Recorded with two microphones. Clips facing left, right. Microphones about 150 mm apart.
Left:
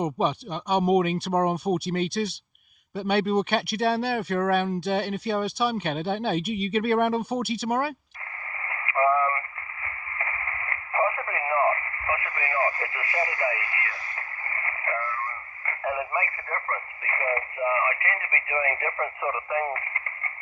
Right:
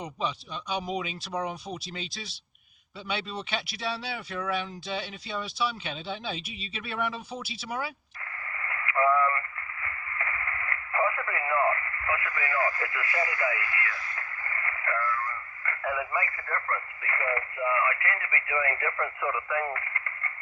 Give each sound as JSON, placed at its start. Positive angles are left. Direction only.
{"t": 0.0, "sound": "speech", "side_deg": 60}
{"t": 8.6, "sound": "radio", "side_deg": 25}